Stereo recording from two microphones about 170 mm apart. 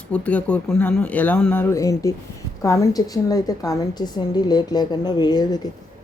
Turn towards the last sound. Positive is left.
turn(degrees=25)  # may be behind; listen again after turning